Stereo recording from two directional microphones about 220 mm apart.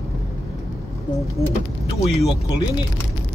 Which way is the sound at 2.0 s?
20° left (ahead or behind).